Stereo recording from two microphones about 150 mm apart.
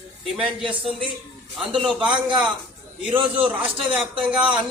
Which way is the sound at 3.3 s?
35° right (ahead or behind).